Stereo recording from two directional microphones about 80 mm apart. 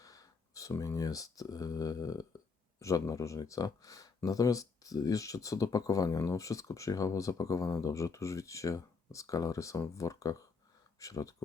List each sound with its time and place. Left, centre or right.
0.0 s speech: left